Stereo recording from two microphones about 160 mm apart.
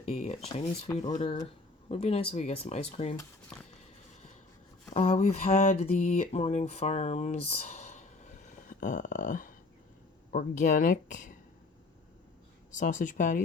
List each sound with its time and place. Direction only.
0.0 s speech: 40° left (ahead or behind)
1.1 s speech: 30° left (ahead or behind)
4.9 s a sound: 45° left (ahead or behind)
10.3 s speech: 55° left (ahead or behind)
12.7 s speech: 55° left (ahead or behind)